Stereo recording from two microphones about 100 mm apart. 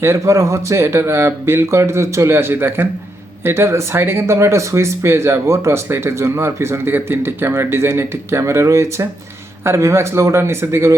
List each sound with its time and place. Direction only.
0.0 s speech: 30° right (ahead or behind)